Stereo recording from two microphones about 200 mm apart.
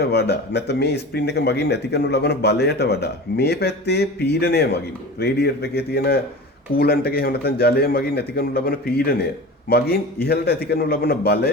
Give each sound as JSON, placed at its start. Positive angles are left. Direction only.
{"t": 0.0, "sound": "a man's voice", "side_deg": 55}